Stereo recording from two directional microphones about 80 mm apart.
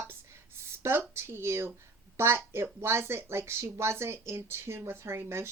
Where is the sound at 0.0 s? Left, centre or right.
Right.